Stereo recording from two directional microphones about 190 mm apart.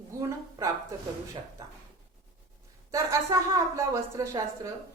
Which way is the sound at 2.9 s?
15° right (ahead or behind).